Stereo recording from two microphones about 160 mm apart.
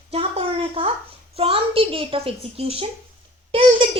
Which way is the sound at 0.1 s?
40° right (ahead or behind).